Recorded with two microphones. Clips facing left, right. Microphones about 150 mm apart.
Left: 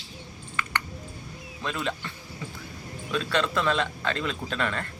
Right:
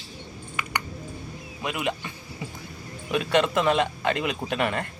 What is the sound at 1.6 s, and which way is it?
Speech, 15° right (ahead or behind).